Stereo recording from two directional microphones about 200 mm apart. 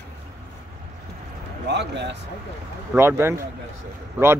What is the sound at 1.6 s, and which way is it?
Speech, 60° right (ahead or behind).